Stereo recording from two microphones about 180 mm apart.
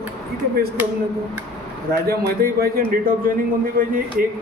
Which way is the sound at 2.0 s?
55° right (ahead or behind).